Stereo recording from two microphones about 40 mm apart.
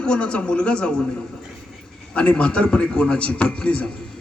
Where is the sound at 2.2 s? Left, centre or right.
Left.